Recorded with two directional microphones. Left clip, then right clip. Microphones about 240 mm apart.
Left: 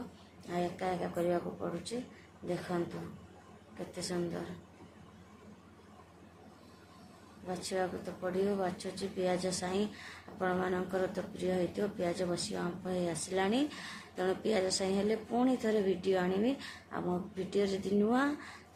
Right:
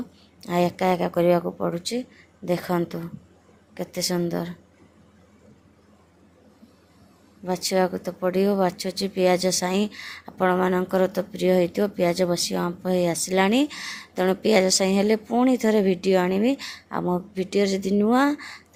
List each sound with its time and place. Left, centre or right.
0.4 s speech: right
7.4 s speech: right